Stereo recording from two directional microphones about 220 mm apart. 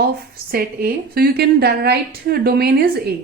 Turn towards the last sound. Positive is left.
turn(degrees=-45)  # may be behind; listen again after turning